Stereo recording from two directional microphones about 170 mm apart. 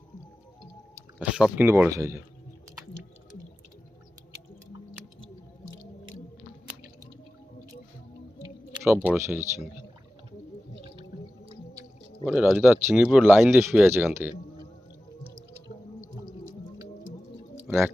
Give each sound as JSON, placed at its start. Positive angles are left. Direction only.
{"t": 1.2, "sound": "speech", "side_deg": -5}
{"t": 8.7, "sound": "speech", "side_deg": -15}
{"t": 12.2, "sound": "speech", "side_deg": -5}